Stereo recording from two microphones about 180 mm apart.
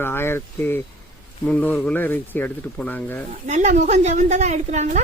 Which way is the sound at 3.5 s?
40° right (ahead or behind).